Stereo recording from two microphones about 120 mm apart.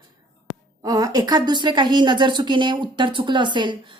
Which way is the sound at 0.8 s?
30° right (ahead or behind).